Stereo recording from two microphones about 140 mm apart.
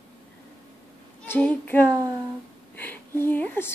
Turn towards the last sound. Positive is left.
turn(degrees=15)  # may be behind; listen again after turning